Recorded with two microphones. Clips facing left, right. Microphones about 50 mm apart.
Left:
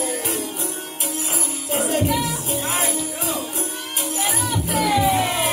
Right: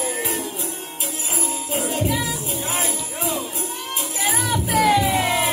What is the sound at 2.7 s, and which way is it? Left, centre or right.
Music, left.